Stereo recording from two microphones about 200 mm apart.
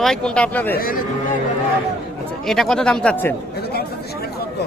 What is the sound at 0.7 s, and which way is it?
Speech, 45° left (ahead or behind).